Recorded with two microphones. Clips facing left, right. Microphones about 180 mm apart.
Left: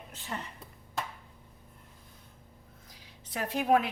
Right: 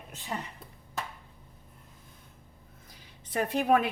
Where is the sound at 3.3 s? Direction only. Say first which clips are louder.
Right 2 dB; 55° right (ahead or behind).